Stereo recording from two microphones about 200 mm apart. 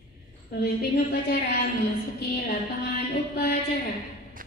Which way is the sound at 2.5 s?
50° left (ahead or behind).